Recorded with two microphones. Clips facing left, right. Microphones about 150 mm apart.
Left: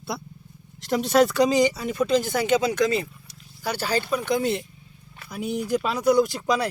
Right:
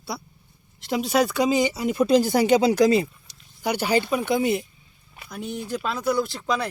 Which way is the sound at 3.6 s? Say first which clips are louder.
Right 3 dB; 15° right (ahead or behind).